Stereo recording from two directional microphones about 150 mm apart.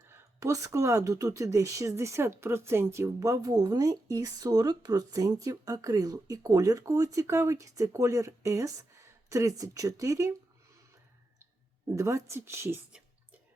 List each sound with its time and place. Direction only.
0.1 s speech: 20° right (ahead or behind)
11.9 s a woman's voice: 20° right (ahead or behind)